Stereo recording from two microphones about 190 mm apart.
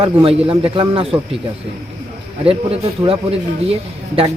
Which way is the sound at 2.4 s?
30° right (ahead or behind).